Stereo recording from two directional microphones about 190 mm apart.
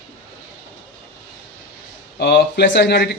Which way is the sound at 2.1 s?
60° left (ahead or behind).